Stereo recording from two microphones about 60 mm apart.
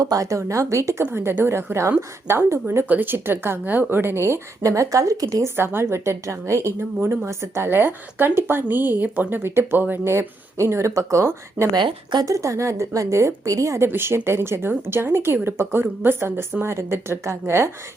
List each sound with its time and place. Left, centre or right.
0.0 s speech: right
1.1 s speech: right
2.9 s a woman's voice: right
5.5 s a woman's voice: right
10.0 s speech: right
11.6 s a woman's voice: right
12.2 s speech: right
13.8 s a woman's voice: right